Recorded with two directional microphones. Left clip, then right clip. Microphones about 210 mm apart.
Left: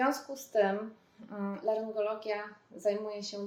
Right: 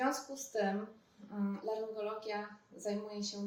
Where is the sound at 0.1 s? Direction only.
35° left (ahead or behind).